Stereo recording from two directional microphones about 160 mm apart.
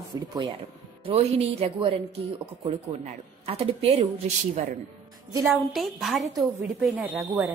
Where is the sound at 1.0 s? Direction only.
35° right (ahead or behind).